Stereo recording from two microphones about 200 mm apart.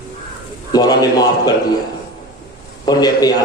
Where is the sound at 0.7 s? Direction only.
20° left (ahead or behind).